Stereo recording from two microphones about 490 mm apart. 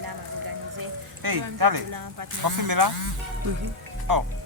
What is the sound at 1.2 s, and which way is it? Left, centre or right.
A woman's voice, right.